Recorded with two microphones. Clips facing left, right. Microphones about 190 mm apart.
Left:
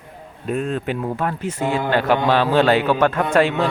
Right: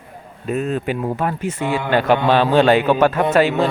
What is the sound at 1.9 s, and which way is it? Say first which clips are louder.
Speech: right 3 dB; 20° right (ahead or behind).